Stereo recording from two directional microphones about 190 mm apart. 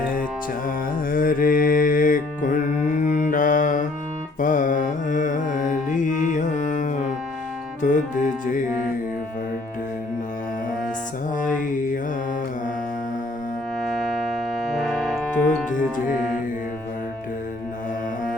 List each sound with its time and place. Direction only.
1.1 s music: 45° left (ahead or behind)
11.3 s mantra: 45° left (ahead or behind)
13.8 s music: centre (ahead or behind)